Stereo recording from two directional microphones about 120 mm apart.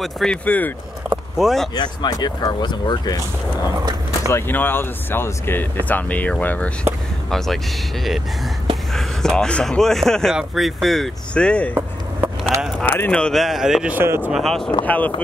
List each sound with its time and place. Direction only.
0.0 s speech: 5° left (ahead or behind)
1.4 s speech: centre (ahead or behind)
1.8 s speech: 35° left (ahead or behind)
4.3 s speech: 15° left (ahead or behind)
12.2 s keys jangling: 20° right (ahead or behind)
12.8 s speech: 15° left (ahead or behind); by 13.9 s 5° right (ahead or behind)
13.9 s speech: 20° right (ahead or behind)
14.3 s speech: 5° left (ahead or behind)